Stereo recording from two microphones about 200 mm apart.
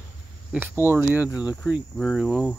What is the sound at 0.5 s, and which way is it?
Speech, 10° right (ahead or behind).